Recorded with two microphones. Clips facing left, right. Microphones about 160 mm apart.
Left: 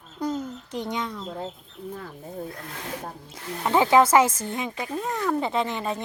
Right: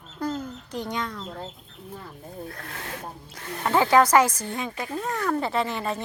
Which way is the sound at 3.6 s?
15° left (ahead or behind).